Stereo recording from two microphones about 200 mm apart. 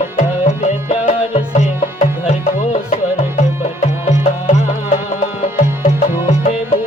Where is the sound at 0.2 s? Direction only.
35° left (ahead or behind).